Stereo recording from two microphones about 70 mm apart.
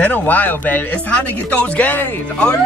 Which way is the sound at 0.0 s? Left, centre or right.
Left.